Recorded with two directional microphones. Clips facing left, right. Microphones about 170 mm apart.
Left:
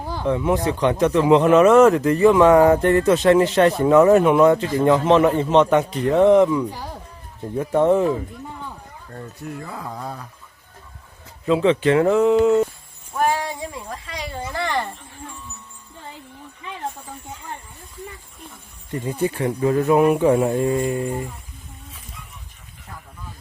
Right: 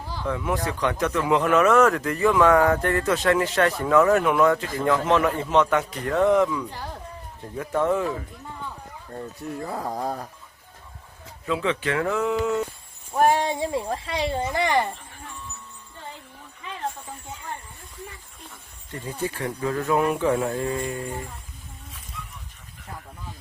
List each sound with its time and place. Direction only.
0.0 s a sound: 50° left (ahead or behind)
0.3 s speech: 25° left (ahead or behind)
6.7 s speech: 10° left (ahead or behind)
7.5 s speech: 25° left (ahead or behind)
9.6 s speech: 40° right (ahead or behind)
11.4 s speech: 30° left (ahead or behind)
13.3 s speech: 25° right (ahead or behind)
19.0 s speech: 15° left (ahead or behind)